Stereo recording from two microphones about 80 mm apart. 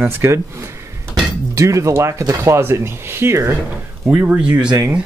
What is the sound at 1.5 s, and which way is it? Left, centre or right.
Speech, right.